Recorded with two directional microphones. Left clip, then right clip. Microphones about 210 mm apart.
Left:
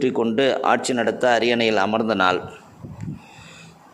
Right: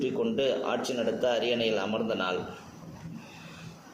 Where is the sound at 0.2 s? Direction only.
50° left (ahead or behind).